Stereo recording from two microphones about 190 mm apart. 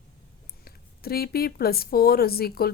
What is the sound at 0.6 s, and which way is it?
Speech, 55° left (ahead or behind).